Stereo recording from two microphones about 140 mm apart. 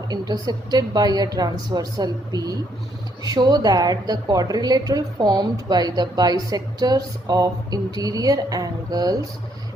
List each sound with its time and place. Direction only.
0.1 s a woman's voice: 30° right (ahead or behind)